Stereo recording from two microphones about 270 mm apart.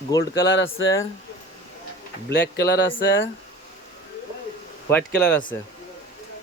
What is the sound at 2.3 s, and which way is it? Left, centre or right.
Speech, left.